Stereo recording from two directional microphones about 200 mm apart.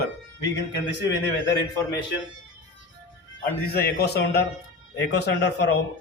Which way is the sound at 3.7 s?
50° left (ahead or behind).